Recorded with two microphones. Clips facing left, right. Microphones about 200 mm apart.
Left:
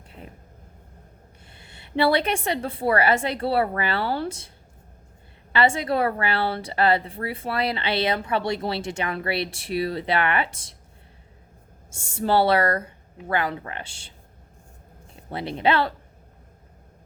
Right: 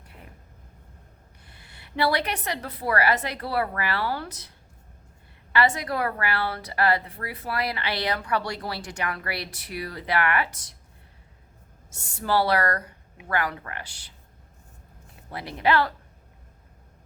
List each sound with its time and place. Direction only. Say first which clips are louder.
1.5 s a woman's voice: left 1 dB; 25° left (ahead or behind)
11.9 s a woman's voice: left 4 dB; 25° left (ahead or behind)
15.1 s speech: left 6 dB; 25° left (ahead or behind)